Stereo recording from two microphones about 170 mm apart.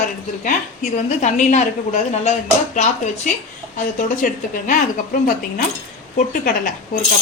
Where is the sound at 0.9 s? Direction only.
45° left (ahead or behind).